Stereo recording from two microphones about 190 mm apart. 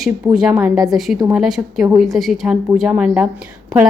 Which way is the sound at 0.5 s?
15° right (ahead or behind).